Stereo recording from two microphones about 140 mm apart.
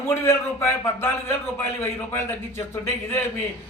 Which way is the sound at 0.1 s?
15° left (ahead or behind).